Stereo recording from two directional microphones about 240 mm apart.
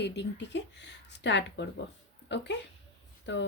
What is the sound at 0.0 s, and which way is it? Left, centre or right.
Speech, left.